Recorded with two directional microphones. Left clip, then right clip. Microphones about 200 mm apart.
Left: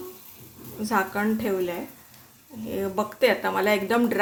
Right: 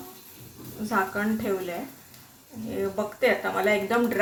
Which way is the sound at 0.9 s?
35° left (ahead or behind).